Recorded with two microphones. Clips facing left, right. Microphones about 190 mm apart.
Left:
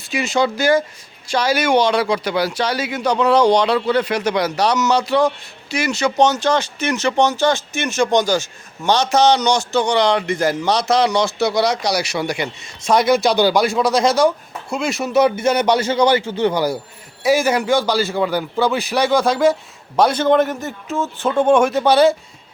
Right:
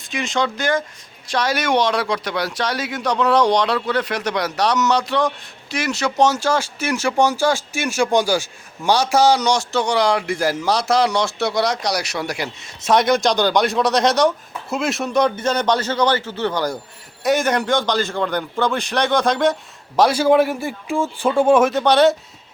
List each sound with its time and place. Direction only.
0.0 s a man's voice: 5° left (ahead or behind)